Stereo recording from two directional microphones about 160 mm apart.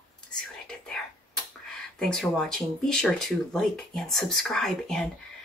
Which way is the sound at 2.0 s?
5° left (ahead or behind).